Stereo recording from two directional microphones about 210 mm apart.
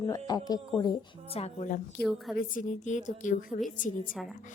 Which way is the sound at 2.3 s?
40° left (ahead or behind).